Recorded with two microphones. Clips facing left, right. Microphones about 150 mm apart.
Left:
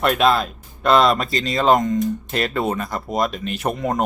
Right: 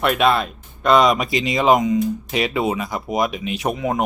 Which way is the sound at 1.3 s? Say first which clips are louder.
Right 1 dB; 15° right (ahead or behind).